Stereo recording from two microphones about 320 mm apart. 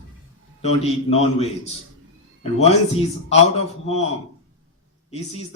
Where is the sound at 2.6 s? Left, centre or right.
Centre.